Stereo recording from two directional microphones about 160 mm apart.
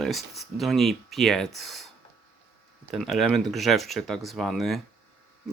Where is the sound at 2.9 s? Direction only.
Centre (ahead or behind).